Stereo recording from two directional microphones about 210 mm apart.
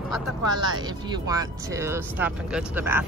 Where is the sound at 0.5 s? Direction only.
20° right (ahead or behind).